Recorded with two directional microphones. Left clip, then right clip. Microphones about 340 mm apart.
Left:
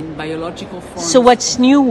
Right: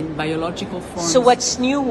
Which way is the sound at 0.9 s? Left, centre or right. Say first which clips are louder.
Left 4 dB; left.